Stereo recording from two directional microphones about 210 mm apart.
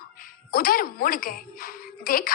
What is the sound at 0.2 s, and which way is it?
A woman's voice, 40° left (ahead or behind).